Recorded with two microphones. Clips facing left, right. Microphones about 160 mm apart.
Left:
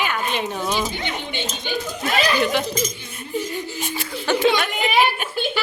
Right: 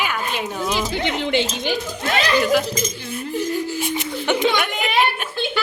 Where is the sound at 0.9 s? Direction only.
90° right.